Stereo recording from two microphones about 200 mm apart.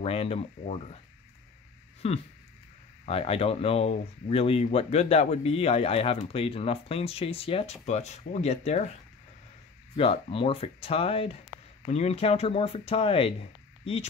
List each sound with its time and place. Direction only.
0.0 s speech: 30° left (ahead or behind)
2.0 s speech: 30° left (ahead or behind)
9.9 s speech: 30° left (ahead or behind)